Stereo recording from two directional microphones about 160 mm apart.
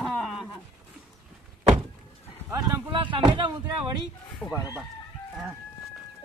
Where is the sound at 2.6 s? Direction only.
30° right (ahead or behind).